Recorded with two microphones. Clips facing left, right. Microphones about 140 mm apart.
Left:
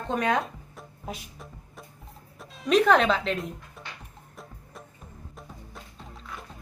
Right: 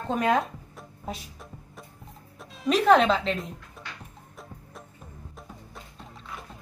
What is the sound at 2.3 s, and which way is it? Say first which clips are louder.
Speech: left 3 dB; centre (ahead or behind).